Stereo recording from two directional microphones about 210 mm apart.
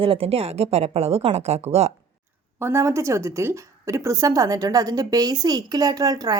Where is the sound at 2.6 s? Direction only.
10° right (ahead or behind).